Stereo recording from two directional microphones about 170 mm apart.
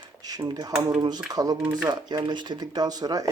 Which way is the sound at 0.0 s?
25° right (ahead or behind).